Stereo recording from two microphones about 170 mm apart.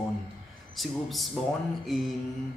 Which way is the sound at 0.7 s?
Centre (ahead or behind).